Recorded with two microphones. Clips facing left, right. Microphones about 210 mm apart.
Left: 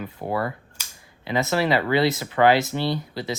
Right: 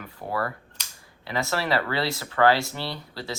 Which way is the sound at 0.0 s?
20° left (ahead or behind).